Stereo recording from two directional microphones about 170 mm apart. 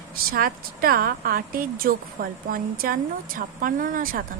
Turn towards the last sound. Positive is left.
turn(degrees=-55)  # may be behind; listen again after turning